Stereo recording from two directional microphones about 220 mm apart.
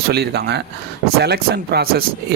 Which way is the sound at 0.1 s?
50° right (ahead or behind).